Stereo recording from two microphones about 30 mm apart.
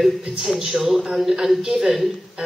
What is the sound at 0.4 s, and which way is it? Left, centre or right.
Speech, centre.